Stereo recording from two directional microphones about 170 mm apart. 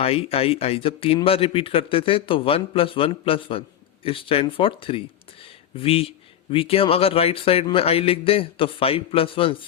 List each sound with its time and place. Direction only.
0.0 s speech: 35° left (ahead or behind)